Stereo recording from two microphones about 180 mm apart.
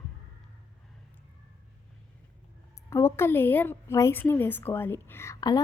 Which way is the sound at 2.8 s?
15° left (ahead or behind).